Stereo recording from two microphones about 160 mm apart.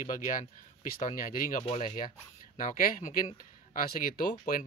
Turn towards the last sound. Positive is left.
turn(degrees=55)  # may be behind; listen again after turning